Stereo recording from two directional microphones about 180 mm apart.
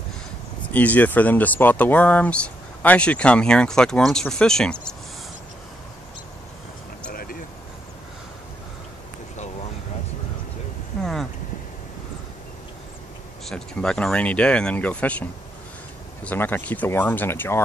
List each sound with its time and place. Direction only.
0.7 s speech: 10° left (ahead or behind)
7.1 s a sound: 55° left (ahead or behind)
13.5 s speech: 5° left (ahead or behind)
16.3 s speech: 10° left (ahead or behind)